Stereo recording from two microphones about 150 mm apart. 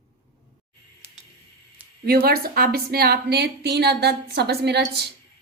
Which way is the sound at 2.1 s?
90° right.